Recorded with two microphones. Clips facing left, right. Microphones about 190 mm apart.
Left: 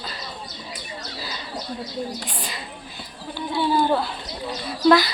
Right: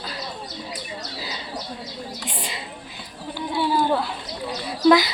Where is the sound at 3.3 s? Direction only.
10° right (ahead or behind).